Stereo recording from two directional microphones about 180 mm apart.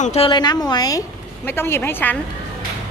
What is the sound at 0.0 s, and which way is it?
Speech, 40° left (ahead or behind).